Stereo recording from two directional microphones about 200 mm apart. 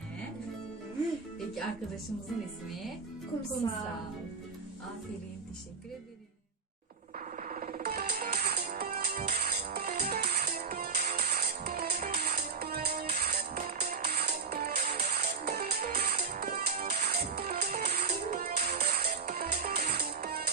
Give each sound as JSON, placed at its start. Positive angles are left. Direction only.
{"t": 7.3, "sound": "music", "side_deg": -40}
{"t": 18.0, "sound": "music", "side_deg": -40}